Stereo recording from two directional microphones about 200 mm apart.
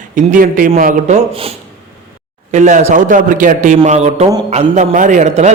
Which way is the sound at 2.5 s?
35° right (ahead or behind).